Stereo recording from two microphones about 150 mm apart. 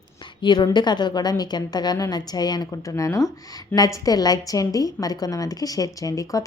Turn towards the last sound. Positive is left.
turn(degrees=25)  # may be behind; listen again after turning